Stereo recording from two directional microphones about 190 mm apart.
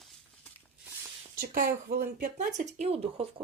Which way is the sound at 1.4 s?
50° right (ahead or behind).